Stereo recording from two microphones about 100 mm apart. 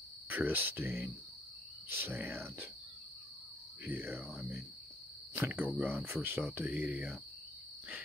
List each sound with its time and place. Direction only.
0.3 s speech: 15° right (ahead or behind)
3.8 s speech: 20° right (ahead or behind)